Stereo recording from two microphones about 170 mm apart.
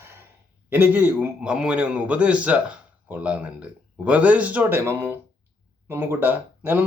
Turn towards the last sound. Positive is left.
turn(degrees=-10)  # may be behind; listen again after turning